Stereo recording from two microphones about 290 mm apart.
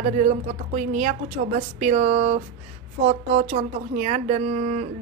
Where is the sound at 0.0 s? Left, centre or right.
Right.